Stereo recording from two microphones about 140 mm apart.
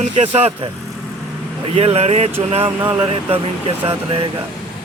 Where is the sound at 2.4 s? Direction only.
45° right (ahead or behind).